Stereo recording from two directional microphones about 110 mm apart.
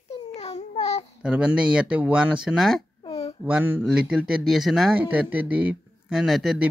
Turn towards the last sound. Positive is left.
turn(degrees=0)  # may be behind; listen again after turning